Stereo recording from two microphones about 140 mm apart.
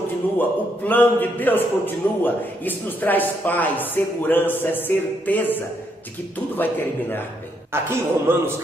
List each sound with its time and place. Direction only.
0.4 s a man's voice: 15° left (ahead or behind)
7.7 s a man's voice: 15° right (ahead or behind)